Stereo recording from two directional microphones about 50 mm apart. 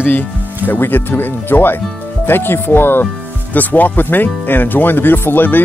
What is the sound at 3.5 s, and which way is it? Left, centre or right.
Speech, left.